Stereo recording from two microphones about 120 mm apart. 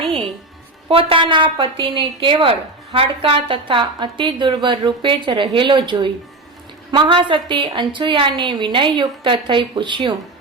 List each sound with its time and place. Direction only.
0.9 s a woman's voice: 50° right (ahead or behind)